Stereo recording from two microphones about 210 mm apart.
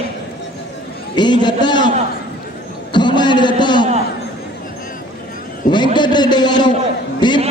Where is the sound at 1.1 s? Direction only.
20° left (ahead or behind).